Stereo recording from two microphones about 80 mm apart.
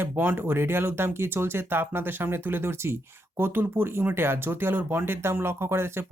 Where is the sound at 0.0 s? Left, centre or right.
Right.